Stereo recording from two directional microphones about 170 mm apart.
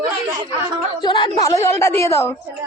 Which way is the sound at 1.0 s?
25° left (ahead or behind).